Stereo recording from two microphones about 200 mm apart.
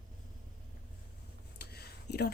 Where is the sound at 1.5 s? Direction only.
55° left (ahead or behind).